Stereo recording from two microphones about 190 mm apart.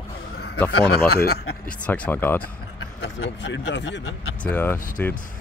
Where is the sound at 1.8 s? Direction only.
5° left (ahead or behind).